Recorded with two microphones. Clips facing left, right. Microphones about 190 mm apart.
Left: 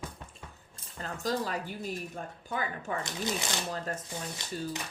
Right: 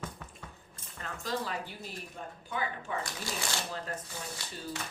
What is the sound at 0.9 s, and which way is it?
A woman's voice, 35° left (ahead or behind).